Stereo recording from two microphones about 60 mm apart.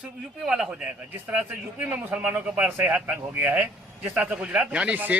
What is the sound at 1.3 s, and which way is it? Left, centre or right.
Speech, centre.